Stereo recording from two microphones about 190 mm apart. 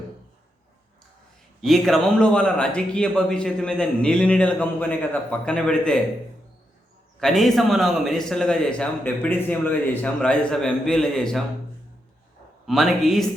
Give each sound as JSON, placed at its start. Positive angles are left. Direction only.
{"t": 1.6, "sound": "speech", "side_deg": 0}
{"t": 7.2, "sound": "speech", "side_deg": 0}
{"t": 12.6, "sound": "speech", "side_deg": 0}